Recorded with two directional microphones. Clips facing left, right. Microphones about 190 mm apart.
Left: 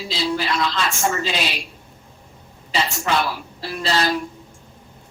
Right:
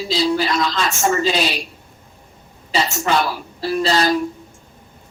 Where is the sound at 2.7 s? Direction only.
40° right (ahead or behind).